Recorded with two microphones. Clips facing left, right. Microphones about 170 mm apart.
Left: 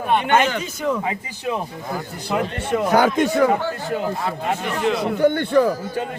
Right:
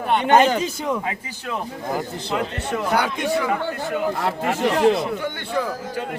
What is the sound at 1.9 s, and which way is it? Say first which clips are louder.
Speech: right 6 dB; 20° right (ahead or behind).